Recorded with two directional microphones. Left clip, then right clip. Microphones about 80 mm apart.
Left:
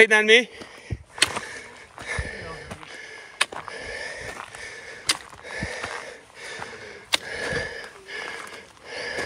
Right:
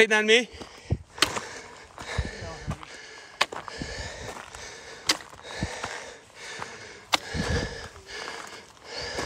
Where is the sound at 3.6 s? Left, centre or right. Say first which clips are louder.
Left 3 dB; right.